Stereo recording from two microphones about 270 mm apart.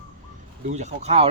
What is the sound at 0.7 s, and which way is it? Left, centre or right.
Speech, right.